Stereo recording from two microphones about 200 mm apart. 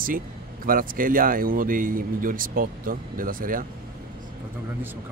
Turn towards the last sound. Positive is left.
turn(degrees=-45)  # may be behind; listen again after turning